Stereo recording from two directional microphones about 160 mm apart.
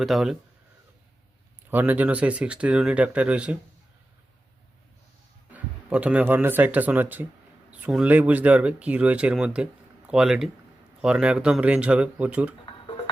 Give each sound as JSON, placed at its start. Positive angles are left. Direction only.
{"t": 0.0, "sound": "speech", "side_deg": 0}
{"t": 1.7, "sound": "speech", "side_deg": -10}
{"t": 5.5, "sound": "speech", "side_deg": -10}